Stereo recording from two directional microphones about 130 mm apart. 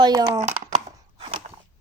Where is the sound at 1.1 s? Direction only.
45° right (ahead or behind).